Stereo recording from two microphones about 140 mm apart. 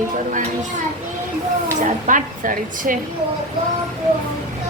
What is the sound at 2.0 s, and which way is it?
Speech, 70° right (ahead or behind).